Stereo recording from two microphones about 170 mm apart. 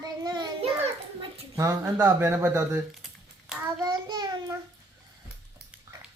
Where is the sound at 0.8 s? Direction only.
35° right (ahead or behind).